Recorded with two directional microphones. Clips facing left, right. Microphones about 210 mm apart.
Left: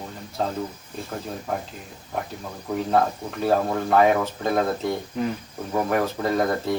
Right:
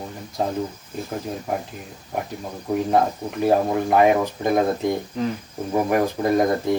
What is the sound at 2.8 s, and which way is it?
A man's voice, 15° right (ahead or behind).